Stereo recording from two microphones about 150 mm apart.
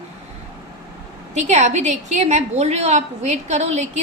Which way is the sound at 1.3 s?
50° right (ahead or behind).